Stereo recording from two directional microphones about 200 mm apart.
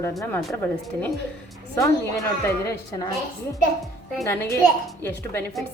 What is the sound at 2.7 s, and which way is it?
Speech, 15° left (ahead or behind).